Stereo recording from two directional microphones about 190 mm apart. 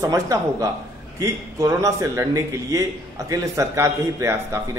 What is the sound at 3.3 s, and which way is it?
A man's voice, 15° right (ahead or behind).